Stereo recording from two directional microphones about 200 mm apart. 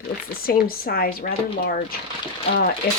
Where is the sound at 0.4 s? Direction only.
50° left (ahead or behind).